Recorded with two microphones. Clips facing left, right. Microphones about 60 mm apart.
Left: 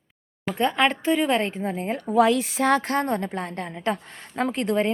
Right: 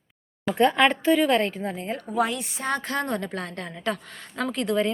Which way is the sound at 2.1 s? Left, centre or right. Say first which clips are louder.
Left 7 dB; left.